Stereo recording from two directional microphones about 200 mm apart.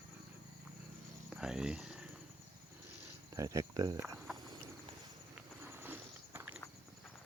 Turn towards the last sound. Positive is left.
turn(degrees=-10)  # may be behind; listen again after turning